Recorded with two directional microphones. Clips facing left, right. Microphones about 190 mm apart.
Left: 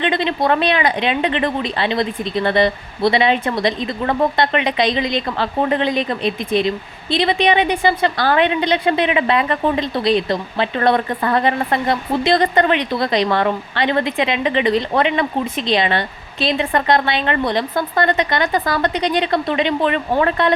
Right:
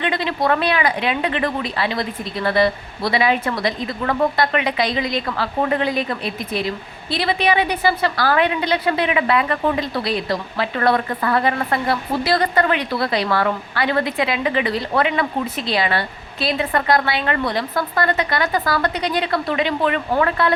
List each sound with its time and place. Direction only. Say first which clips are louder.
0.0 s speech: left 3 dB; 20° left (ahead or behind)